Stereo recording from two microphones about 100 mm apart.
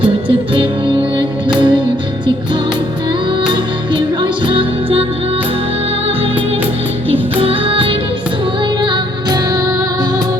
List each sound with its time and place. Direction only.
0.0 s music: 60° right (ahead or behind)
3.4 s music: 50° right (ahead or behind)
7.1 s music: 65° right (ahead or behind)
8.8 s music: 45° right (ahead or behind)